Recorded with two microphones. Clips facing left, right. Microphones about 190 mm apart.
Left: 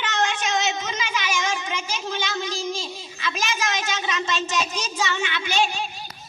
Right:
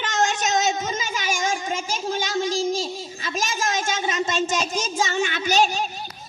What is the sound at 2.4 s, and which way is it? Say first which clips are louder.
A child's voice: right 5 dB; 45° right (ahead or behind).